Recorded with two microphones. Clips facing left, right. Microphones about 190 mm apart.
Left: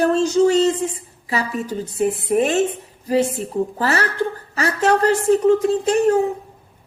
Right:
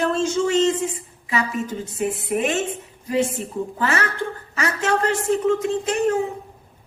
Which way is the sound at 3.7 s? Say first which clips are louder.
Even; 35° left (ahead or behind).